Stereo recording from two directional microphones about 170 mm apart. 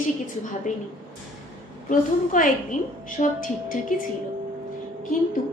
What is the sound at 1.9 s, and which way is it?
A woman's voice, 50° left (ahead or behind).